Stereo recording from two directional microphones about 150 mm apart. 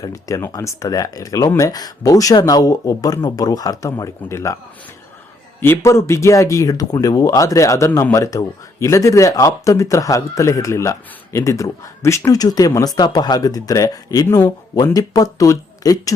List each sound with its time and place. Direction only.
0.0 s speech: 20° left (ahead or behind)
5.5 s speech: 15° left (ahead or behind)